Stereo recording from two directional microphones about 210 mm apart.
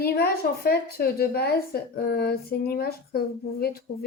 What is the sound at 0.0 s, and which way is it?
A woman's voice, 45° left (ahead or behind).